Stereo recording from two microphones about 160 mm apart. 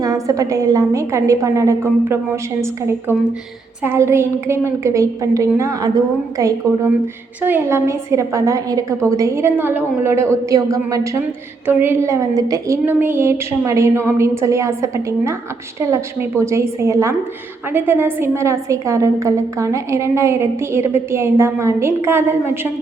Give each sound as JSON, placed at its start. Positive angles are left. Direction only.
{"t": 0.0, "sound": "a woman's voice", "side_deg": -20}